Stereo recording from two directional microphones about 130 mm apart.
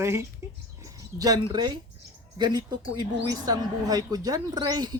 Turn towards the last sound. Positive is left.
turn(degrees=-30)  # may be behind; listen again after turning